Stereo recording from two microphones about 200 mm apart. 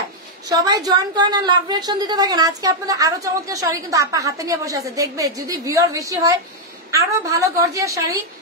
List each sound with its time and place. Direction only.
0.5 s a woman's voice: 20° right (ahead or behind)